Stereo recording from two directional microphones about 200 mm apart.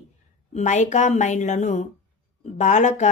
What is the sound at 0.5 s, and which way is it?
Speech, 35° left (ahead or behind).